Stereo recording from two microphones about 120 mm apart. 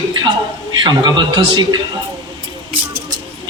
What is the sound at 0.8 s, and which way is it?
Speech, 40° right (ahead or behind).